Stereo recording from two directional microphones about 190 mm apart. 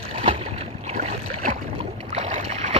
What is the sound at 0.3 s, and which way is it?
Boat, 30° right (ahead or behind).